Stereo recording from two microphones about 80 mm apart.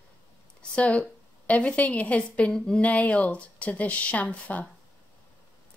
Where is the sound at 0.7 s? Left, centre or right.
Centre.